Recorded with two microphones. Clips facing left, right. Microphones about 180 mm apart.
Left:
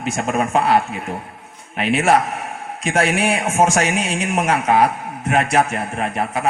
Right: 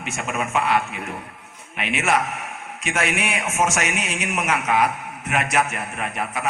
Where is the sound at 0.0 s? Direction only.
35° left (ahead or behind).